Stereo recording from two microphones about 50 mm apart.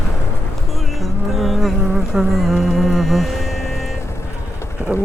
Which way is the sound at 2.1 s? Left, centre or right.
Centre.